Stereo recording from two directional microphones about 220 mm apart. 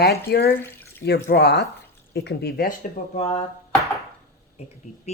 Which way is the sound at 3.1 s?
30° left (ahead or behind).